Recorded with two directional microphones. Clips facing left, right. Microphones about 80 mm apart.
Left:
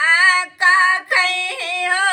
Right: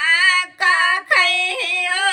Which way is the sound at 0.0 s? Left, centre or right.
Left.